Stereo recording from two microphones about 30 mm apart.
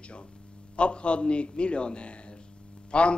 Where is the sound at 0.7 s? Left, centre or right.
Left.